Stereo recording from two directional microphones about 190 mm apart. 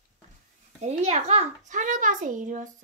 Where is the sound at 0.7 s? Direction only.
35° right (ahead or behind).